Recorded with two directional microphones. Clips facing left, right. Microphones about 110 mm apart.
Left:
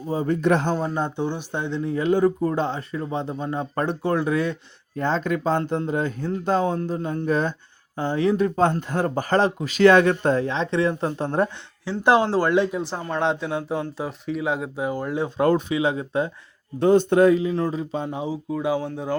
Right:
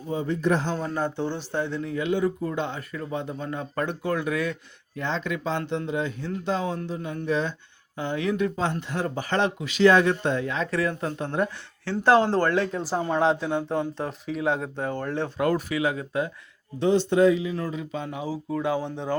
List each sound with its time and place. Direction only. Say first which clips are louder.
0.1 s speech: left 4 dB; 40° left (ahead or behind)
0.4 s a man's voice: left 3 dB; 65° left (ahead or behind)
0.9 s speech: left 2 dB; 20° left (ahead or behind)
4.9 s speech: left 5 dB; 40° left (ahead or behind)
8.7 s speech: left 5 dB; 45° left (ahead or behind)
9.8 s speech: left 3 dB; 60° left (ahead or behind)
10.2 s speech: left 4 dB; 35° left (ahead or behind)
11.9 s speech: left 1 dB; 15° left (ahead or behind)
13.0 s speech: right 2 dB; 5° right (ahead or behind); by 15.3 s 10° left (ahead or behind)
15.4 s speech: left 5 dB; 25° left (ahead or behind)
16.8 s speech: left 3 dB; 50° left (ahead or behind)
17.4 s speech: left 6 dB; 35° left (ahead or behind)
18.5 s speech: left 2 dB; 10° left (ahead or behind)